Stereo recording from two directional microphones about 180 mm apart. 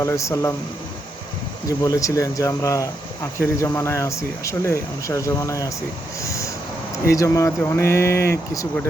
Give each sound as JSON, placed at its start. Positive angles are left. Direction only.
{"t": 0.0, "sound": "speech", "side_deg": 15}
{"t": 1.6, "sound": "speech", "side_deg": 20}
{"t": 6.2, "sound": "vehicle", "side_deg": 15}
{"t": 7.0, "sound": "speech", "side_deg": 15}